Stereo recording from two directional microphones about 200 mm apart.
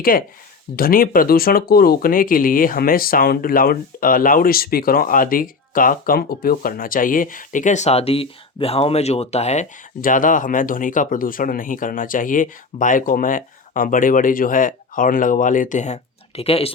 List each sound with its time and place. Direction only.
0.0 s speech: 45° left (ahead or behind); by 16.7 s 30° left (ahead or behind)